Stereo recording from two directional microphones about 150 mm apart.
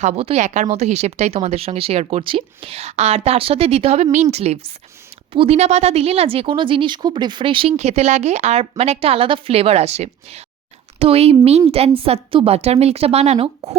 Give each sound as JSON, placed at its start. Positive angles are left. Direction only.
{"t": 0.0, "sound": "speech", "side_deg": -45}